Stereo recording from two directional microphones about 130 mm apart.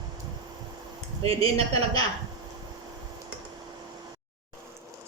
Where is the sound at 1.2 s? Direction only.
50° right (ahead or behind).